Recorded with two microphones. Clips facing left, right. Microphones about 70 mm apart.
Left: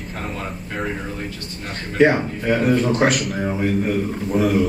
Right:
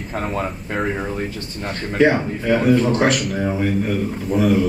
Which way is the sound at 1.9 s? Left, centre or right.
Centre.